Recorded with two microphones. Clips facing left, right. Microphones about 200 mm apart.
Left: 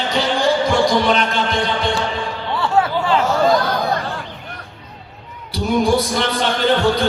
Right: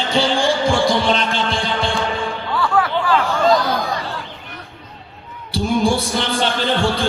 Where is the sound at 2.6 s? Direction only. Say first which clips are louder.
Left 1 dB; 25° left (ahead or behind).